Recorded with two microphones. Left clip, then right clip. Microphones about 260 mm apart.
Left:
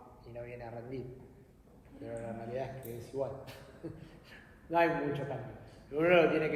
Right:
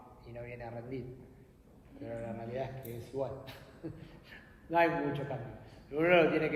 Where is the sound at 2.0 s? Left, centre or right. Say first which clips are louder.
Even; right.